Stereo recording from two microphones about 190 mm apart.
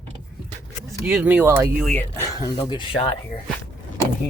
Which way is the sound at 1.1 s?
10° right (ahead or behind).